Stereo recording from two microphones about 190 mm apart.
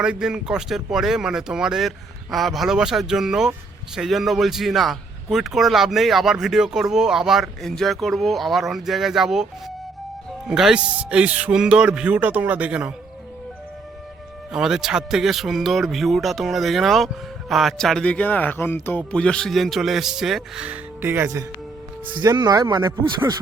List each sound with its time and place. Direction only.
0.0 s a man's voice: 5° right (ahead or behind)
10.5 s a man's voice: 5° right (ahead or behind)
14.5 s a man's voice: 5° right (ahead or behind)